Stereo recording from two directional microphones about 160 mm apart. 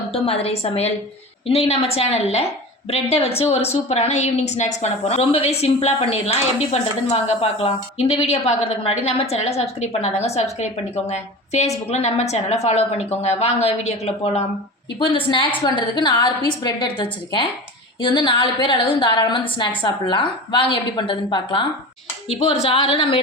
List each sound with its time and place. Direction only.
0.1 s a woman's voice: 40° left (ahead or behind)
14.9 s a woman's voice: 30° left (ahead or behind)